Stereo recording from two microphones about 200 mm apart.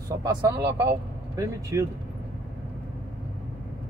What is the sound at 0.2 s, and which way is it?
Speech, 20° right (ahead or behind).